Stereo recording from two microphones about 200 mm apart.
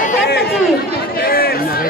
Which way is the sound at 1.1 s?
50° left (ahead or behind).